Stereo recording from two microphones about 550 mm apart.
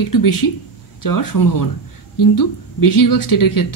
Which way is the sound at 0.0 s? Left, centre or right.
Left.